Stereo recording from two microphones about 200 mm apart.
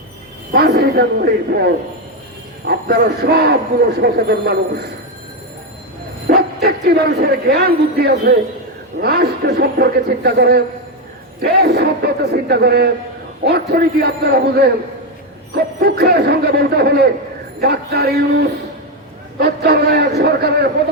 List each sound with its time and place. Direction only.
0.5 s speech: 50° right (ahead or behind)
6.2 s speech: 50° right (ahead or behind)
11.6 s speech: 50° right (ahead or behind)